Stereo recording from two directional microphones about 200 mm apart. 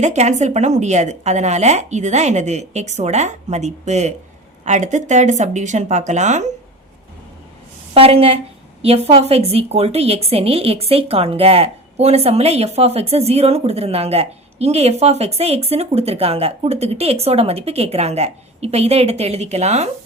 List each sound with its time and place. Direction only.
0.0 s a woman's voice: 35° right (ahead or behind)
7.9 s a woman's voice: 30° right (ahead or behind)